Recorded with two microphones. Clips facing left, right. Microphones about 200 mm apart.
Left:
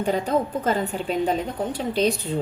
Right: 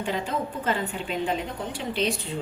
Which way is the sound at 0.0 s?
40° left (ahead or behind).